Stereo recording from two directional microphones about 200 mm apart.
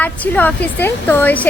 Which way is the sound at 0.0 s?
10° left (ahead or behind).